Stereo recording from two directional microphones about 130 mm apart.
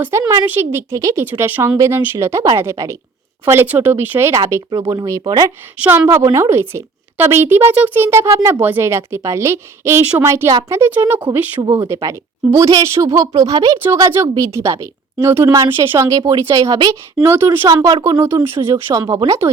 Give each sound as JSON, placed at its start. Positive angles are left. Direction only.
{"t": 0.0, "sound": "a woman's voice", "side_deg": -25}
{"t": 10.5, "sound": "speech", "side_deg": -30}
{"t": 10.8, "sound": "speech", "side_deg": -20}
{"t": 11.6, "sound": "a woman's voice", "side_deg": -25}
{"t": 17.7, "sound": "a woman's voice", "side_deg": -30}
{"t": 18.2, "sound": "a woman's voice", "side_deg": -20}